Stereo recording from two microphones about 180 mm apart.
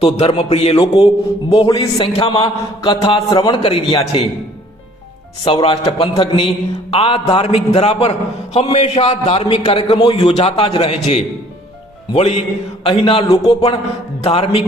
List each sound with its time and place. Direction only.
0.0 s a man's voice: 35° left (ahead or behind)
5.5 s a man's voice: 30° left (ahead or behind)